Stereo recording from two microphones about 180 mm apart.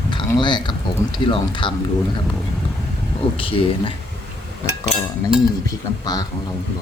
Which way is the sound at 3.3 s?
30° left (ahead or behind).